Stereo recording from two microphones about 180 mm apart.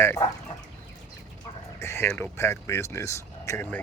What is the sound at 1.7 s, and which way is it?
Speech, 15° left (ahead or behind).